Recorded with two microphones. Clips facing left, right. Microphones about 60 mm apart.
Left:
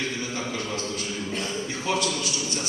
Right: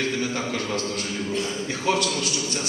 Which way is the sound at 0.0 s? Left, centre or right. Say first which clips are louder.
Right 4 dB; right.